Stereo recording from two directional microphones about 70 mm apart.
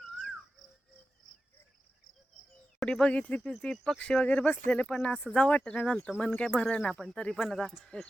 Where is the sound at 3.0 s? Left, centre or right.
Centre.